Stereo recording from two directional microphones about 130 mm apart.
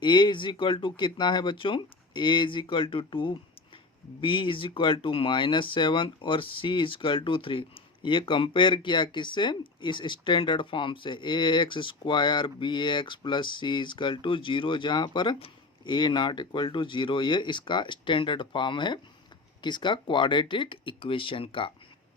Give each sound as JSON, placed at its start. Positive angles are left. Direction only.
{"t": 0.0, "sound": "speech", "side_deg": 35}